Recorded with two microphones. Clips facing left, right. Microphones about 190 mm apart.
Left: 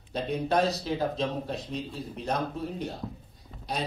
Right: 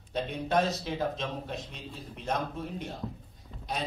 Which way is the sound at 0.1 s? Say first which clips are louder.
Left 2 dB; 35° left (ahead or behind).